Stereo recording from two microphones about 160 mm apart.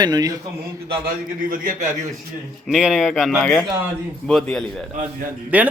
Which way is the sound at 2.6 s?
5° right (ahead or behind).